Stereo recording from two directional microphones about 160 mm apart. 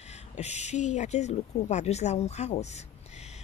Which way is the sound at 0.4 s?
45° left (ahead or behind).